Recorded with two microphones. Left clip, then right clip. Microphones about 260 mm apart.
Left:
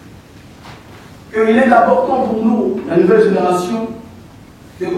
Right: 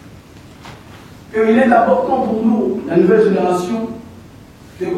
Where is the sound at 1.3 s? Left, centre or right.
Centre.